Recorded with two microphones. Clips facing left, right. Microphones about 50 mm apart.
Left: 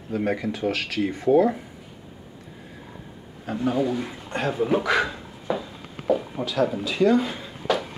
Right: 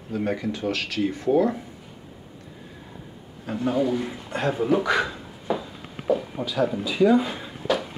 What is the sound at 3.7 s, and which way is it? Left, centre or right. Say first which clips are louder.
Speech: right 4 dB; centre.